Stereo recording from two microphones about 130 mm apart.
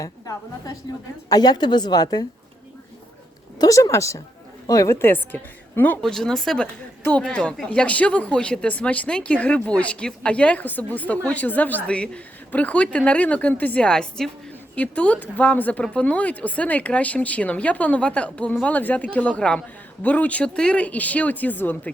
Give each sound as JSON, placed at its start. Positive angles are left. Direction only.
{"t": 0.0, "sound": "a woman's voice", "side_deg": 25}
{"t": 3.6, "sound": "a woman's voice", "side_deg": 25}